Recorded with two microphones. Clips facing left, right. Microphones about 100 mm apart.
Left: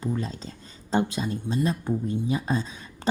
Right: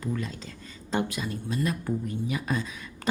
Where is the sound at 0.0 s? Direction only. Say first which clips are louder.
Left 2 dB; 30° left (ahead or behind).